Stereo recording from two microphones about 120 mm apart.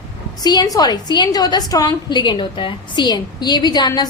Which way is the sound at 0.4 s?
35° left (ahead or behind).